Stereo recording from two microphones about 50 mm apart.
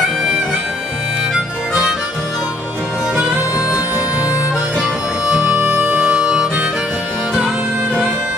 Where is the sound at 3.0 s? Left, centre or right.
Centre.